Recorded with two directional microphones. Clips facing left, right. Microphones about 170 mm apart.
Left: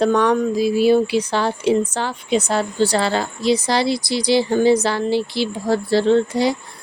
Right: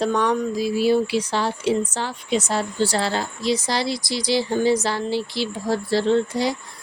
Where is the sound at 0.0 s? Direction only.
65° left (ahead or behind).